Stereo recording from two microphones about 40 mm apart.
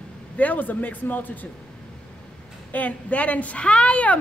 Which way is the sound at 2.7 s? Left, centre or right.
Left.